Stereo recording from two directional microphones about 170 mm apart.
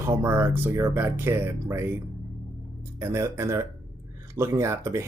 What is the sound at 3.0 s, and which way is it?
Speech, 15° right (ahead or behind).